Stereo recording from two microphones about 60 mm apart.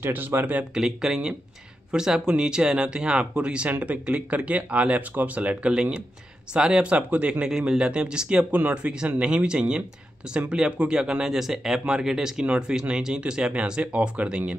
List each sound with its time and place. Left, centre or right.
0.0 s speech: right
0.7 s speech: centre